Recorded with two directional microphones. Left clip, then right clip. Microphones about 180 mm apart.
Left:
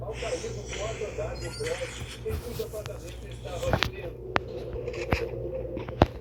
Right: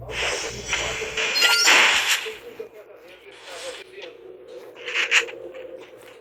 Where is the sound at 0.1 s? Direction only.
55° right (ahead or behind).